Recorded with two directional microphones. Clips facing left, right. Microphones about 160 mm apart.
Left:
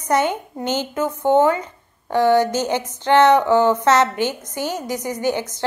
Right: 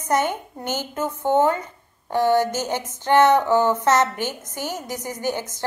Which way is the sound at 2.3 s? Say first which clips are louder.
Left 3 dB; 15° left (ahead or behind).